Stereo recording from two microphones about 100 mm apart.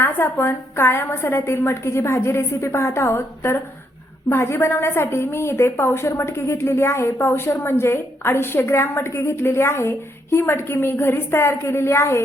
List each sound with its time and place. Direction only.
0.0 s a woman's voice: 25° left (ahead or behind)